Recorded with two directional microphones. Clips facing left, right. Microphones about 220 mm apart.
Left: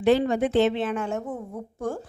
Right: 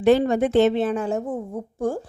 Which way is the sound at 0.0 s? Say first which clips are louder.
Right 3 dB; 45° right (ahead or behind).